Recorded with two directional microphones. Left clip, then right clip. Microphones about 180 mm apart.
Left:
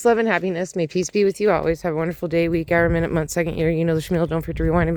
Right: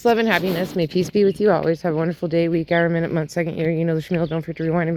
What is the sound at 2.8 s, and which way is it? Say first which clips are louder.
Speech: left 1 dB; 30° left (ahead or behind).